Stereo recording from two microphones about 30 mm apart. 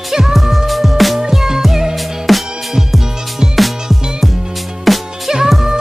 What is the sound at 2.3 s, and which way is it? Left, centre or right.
Music, centre.